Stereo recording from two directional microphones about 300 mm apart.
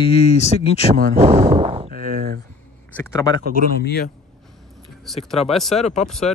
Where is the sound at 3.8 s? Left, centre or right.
Left.